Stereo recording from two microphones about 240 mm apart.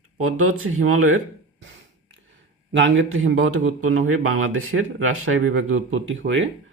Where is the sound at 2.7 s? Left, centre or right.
Right.